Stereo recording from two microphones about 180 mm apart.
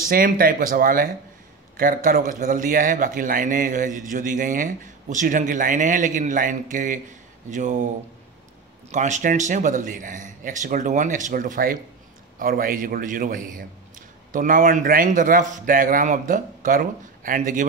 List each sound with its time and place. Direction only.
0.1 s a man's voice: 55° right (ahead or behind)
8.9 s a man's voice: 40° right (ahead or behind)